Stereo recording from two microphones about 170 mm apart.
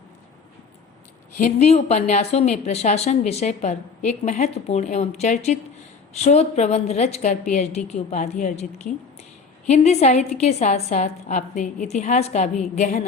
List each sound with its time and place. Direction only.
1.4 s speech: 40° left (ahead or behind)